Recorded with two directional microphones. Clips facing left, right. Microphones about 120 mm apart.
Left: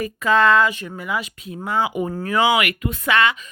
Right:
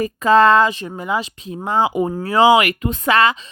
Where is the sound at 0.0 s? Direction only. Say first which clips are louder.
Right 5 dB; 35° right (ahead or behind).